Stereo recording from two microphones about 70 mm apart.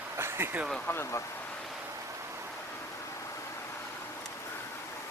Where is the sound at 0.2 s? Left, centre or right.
Right.